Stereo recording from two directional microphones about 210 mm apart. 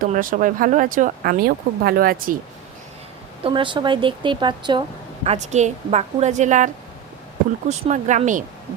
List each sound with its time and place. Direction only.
0.0 s speech: 40° right (ahead or behind)
3.4 s a woman's voice: 25° right (ahead or behind)
7.7 s speech: 35° right (ahead or behind)